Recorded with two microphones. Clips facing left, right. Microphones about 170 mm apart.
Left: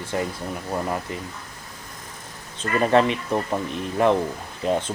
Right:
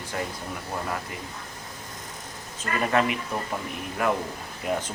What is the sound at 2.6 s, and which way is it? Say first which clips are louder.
Speech: left 6 dB; 30° left (ahead or behind).